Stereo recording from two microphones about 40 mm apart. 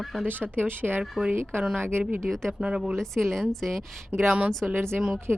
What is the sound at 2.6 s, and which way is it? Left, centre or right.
Speech, right.